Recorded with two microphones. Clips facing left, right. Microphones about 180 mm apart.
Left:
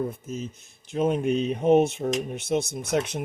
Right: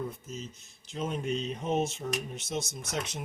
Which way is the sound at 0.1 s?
55° left (ahead or behind).